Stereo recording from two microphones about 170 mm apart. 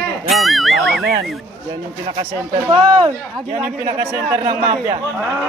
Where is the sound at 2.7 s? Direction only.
30° right (ahead or behind).